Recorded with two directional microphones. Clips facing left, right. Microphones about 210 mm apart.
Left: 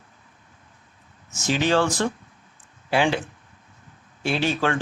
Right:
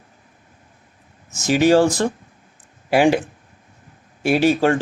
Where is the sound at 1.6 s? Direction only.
40° right (ahead or behind).